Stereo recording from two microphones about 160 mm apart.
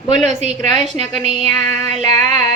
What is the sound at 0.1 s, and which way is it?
Female singing, 45° right (ahead or behind).